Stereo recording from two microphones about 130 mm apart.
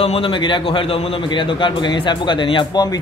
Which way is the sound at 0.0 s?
45° left (ahead or behind).